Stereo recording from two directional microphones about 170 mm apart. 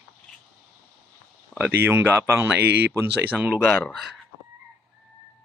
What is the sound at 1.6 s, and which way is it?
Speech, 10° right (ahead or behind).